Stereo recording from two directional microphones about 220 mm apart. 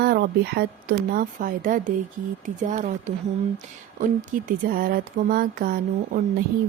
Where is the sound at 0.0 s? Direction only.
45° right (ahead or behind).